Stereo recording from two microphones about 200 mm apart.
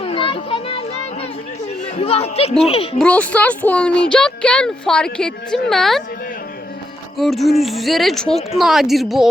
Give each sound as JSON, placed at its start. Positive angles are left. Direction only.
{"t": 0.0, "sound": "children playing", "side_deg": 25}
{"t": 2.0, "sound": "speech", "side_deg": 30}
{"t": 3.0, "sound": "a woman's voice", "side_deg": 5}
{"t": 7.2, "sound": "speech", "side_deg": 0}